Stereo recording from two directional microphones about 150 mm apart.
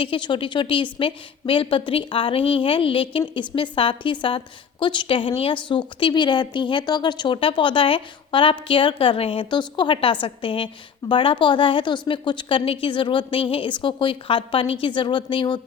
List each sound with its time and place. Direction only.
0.0 s speech: 35° left (ahead or behind)